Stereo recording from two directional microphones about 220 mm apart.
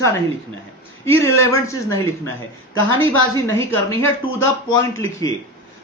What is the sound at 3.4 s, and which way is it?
Speech, 10° left (ahead or behind).